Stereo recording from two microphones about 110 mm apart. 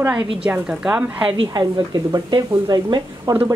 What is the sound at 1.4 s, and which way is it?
Speech, 35° right (ahead or behind).